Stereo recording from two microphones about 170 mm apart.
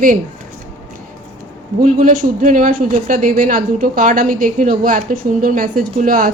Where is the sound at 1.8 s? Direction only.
55° right (ahead or behind).